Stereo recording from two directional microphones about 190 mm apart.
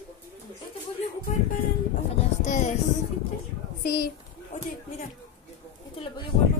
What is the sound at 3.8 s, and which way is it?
Speech, 55° left (ahead or behind).